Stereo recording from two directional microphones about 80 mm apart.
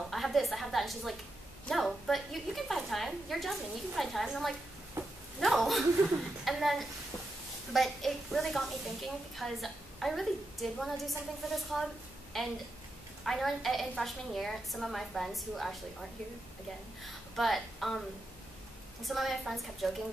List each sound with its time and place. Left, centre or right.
0.1 s a woman's voice: centre
5.0 s a sound: right
5.4 s a child's voice: centre
19.0 s a child's voice: centre